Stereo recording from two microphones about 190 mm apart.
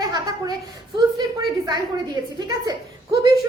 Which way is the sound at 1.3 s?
20° right (ahead or behind).